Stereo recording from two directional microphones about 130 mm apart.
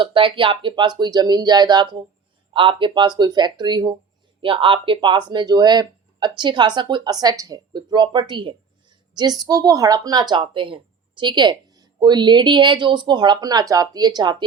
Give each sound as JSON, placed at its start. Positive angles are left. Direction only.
{"t": 0.0, "sound": "speech", "side_deg": -40}